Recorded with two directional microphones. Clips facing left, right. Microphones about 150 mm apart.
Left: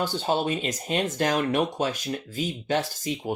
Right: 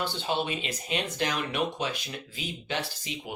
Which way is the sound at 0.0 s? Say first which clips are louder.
Left 5 dB; 40° left (ahead or behind).